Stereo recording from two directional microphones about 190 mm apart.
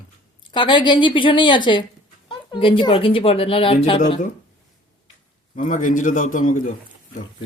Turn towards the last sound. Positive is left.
turn(degrees=45)  # may be behind; listen again after turning